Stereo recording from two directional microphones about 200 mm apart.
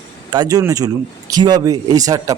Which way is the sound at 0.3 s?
20° right (ahead or behind).